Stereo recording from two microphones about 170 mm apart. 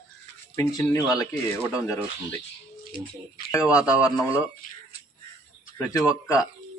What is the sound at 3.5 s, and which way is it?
Speech, 20° left (ahead or behind).